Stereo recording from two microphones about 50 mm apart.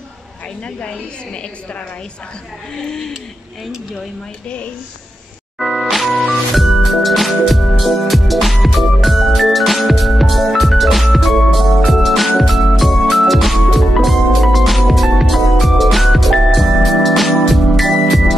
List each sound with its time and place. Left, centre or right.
0.7 s a woman's voice: left
2.8 s speech: centre
5.6 s music: centre